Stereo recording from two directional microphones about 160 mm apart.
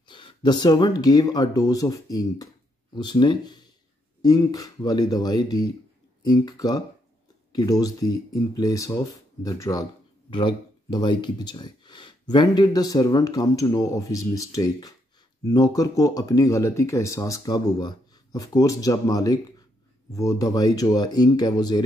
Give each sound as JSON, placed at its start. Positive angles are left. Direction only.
{"t": 0.0, "sound": "speech", "side_deg": 30}